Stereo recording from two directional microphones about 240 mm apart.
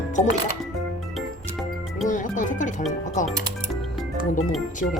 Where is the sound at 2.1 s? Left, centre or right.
Left.